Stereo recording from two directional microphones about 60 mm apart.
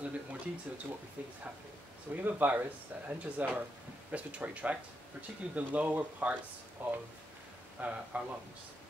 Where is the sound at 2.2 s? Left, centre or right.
Right.